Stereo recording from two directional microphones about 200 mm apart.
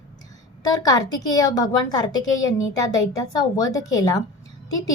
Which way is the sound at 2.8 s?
15° left (ahead or behind).